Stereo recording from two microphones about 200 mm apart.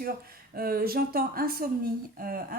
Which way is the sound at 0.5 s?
50° right (ahead or behind).